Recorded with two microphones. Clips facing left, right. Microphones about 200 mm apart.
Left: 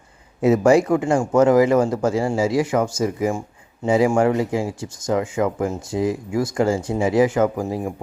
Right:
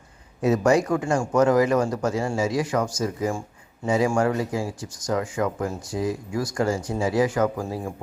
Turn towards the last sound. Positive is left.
turn(degrees=20)  # may be behind; listen again after turning